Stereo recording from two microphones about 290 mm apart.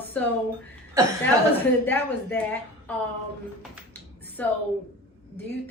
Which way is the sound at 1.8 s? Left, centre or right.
Centre.